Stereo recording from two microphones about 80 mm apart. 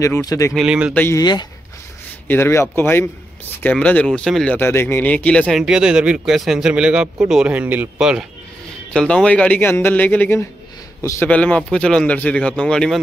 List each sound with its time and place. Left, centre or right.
0.2 s speech: left
0.5 s a man's voice: centre
1.2 s speech: left
2.2 s speech: left
3.8 s a man's voice: centre
4.6 s speech: left
5.6 s a man's voice: centre
6.7 s a man's voice: centre
8.0 s a man's voice: centre
8.9 s a man's voice: centre
9.6 s speech: left
11.0 s a man's voice: left
11.2 s a man's voice: centre